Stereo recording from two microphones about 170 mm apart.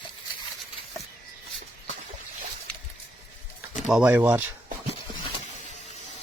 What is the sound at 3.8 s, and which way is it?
Speech, 5° right (ahead or behind).